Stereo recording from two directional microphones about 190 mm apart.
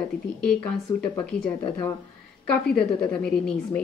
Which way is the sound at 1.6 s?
20° left (ahead or behind).